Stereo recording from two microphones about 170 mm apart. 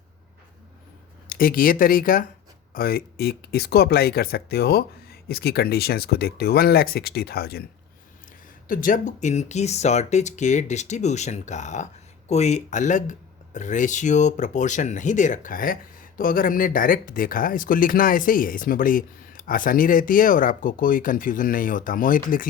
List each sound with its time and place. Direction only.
1.3 s speech: 60° left (ahead or behind)
8.6 s speech: 55° left (ahead or behind)